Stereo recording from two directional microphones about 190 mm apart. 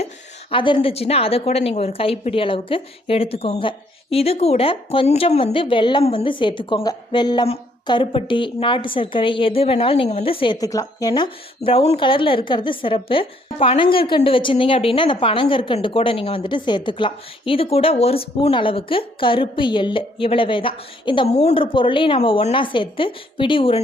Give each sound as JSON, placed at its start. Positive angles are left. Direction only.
{"t": 0.5, "sound": "a woman's voice", "side_deg": 25}